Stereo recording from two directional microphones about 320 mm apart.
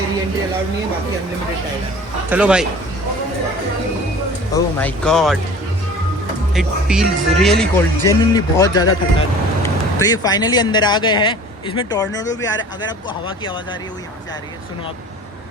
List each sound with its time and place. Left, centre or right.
2.3 s speech: centre
4.5 s speech: centre
6.5 s a man's voice: centre
12.5 s speech: left
13.2 s speech: centre